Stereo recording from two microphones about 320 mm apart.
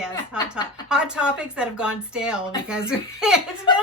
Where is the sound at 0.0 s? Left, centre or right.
Centre.